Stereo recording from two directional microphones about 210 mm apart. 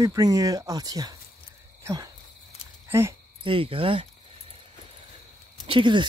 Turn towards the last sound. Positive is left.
turn(degrees=-20)  # may be behind; listen again after turning